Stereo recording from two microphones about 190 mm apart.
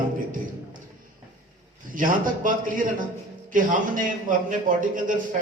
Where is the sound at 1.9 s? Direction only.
45° right (ahead or behind).